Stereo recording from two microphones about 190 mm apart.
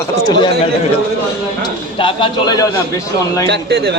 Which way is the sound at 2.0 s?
25° left (ahead or behind).